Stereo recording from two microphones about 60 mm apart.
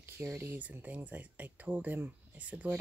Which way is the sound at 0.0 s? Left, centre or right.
Right.